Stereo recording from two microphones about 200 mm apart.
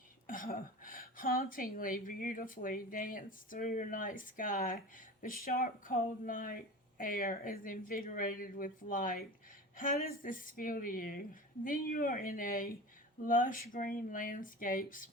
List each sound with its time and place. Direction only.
0.3 s speech: 45° left (ahead or behind)